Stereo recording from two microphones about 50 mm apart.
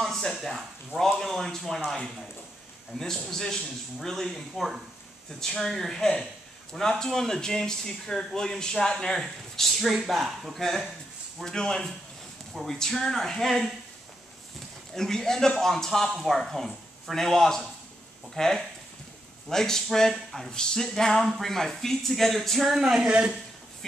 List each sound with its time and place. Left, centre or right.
0.0 s speech: centre
15.0 s speech: centre
22.9 s speech: right